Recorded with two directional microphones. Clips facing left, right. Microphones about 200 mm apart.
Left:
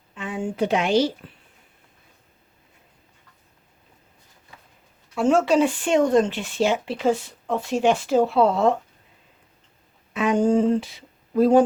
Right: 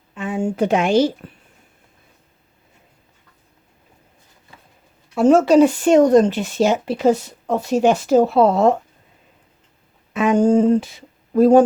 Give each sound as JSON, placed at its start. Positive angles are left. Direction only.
{"t": 0.2, "sound": "a woman's voice", "side_deg": -45}
{"t": 5.1, "sound": "speech", "side_deg": -40}
{"t": 10.2, "sound": "speech", "side_deg": -45}